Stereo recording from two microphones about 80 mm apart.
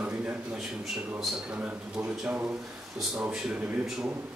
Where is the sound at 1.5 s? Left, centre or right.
Centre.